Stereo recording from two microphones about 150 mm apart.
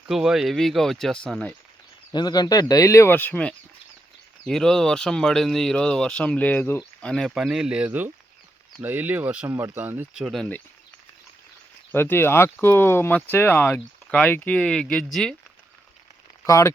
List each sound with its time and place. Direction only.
0.1 s speech: 5° right (ahead or behind)
2.1 s speech: 25° left (ahead or behind)
7.1 s speech: centre (ahead or behind)
11.9 s speech: 15° left (ahead or behind)
16.5 s speech: 20° left (ahead or behind)